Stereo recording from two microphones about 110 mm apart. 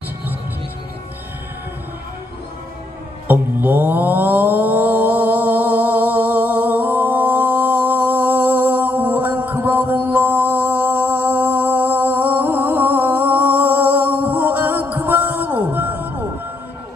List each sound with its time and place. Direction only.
3.3 s mantra: 15° right (ahead or behind)